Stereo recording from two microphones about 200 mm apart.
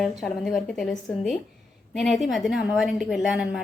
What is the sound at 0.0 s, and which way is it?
A woman's voice, centre (ahead or behind).